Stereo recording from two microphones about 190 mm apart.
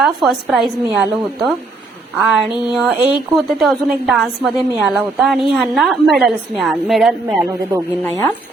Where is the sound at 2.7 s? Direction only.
5° right (ahead or behind).